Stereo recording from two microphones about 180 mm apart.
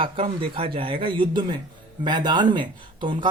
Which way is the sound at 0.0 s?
30° right (ahead or behind).